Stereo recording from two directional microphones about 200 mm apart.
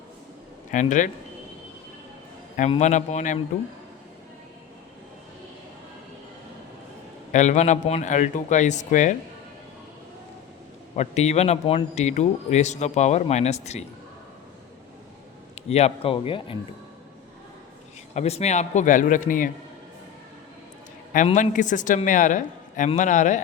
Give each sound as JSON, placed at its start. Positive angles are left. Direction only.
{"t": 0.7, "sound": "a man's voice", "side_deg": 40}
{"t": 2.6, "sound": "a man's voice", "side_deg": 35}
{"t": 7.3, "sound": "a man's voice", "side_deg": 35}
{"t": 10.9, "sound": "a man's voice", "side_deg": 35}
{"t": 15.7, "sound": "speech", "side_deg": 30}
{"t": 18.1, "sound": "a man's voice", "side_deg": 35}
{"t": 21.3, "sound": "a man's voice", "side_deg": 40}